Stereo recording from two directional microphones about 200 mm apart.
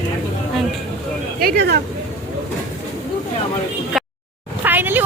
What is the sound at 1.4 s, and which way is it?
Speech, 50° right (ahead or behind).